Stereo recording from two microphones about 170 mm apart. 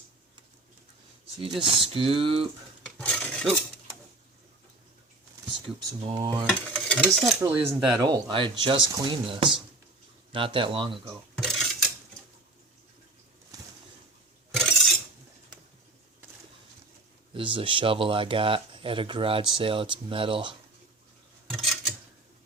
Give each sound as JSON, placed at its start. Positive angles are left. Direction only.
{"t": 1.4, "sound": "speech", "side_deg": -30}
{"t": 2.8, "sound": "filing", "side_deg": 10}
{"t": 5.5, "sound": "speech", "side_deg": -30}
{"t": 6.5, "sound": "stir", "side_deg": 5}
{"t": 7.7, "sound": "speech", "side_deg": -25}
{"t": 11.3, "sound": "cutlery", "side_deg": 5}
{"t": 14.5, "sound": "a sound", "side_deg": 5}
{"t": 17.3, "sound": "speech", "side_deg": -30}
{"t": 21.5, "sound": "a sound", "side_deg": 0}